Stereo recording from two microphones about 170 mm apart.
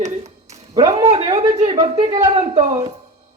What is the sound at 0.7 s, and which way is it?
Speech, 25° right (ahead or behind).